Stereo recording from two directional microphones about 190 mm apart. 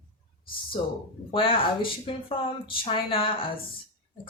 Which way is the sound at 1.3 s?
25° left (ahead or behind).